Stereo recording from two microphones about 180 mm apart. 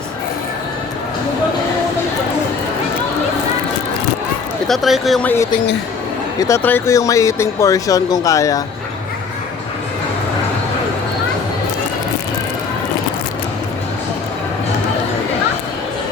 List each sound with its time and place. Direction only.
4.7 s speech: centre (ahead or behind)
6.4 s speech: 15° left (ahead or behind)